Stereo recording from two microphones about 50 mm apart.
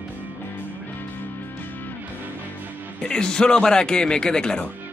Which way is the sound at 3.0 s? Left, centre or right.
Centre.